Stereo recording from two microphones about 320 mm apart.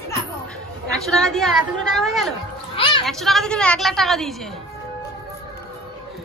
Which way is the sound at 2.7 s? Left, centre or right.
Centre.